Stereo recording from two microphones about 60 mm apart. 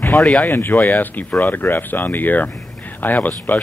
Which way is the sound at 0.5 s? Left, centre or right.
Left.